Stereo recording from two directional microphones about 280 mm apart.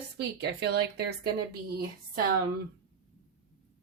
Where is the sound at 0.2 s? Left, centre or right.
Right.